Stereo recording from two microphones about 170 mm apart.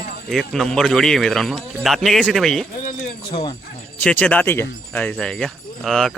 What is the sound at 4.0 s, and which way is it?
Speech, 10° left (ahead or behind).